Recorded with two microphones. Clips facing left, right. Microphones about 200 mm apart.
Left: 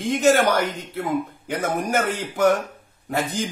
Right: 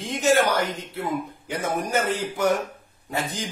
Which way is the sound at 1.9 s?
50° left (ahead or behind).